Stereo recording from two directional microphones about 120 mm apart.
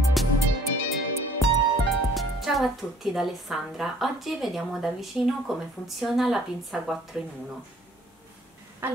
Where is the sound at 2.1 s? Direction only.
Centre (ahead or behind).